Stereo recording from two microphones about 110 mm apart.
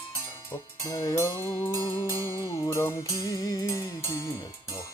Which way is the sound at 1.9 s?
50° left (ahead or behind).